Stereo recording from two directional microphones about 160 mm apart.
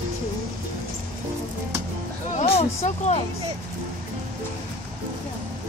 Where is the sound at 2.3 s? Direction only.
40° left (ahead or behind).